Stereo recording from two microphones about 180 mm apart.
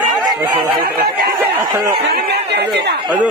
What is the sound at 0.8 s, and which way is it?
Speech, 55° right (ahead or behind).